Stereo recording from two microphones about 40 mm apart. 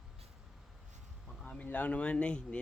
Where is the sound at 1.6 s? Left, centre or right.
Left.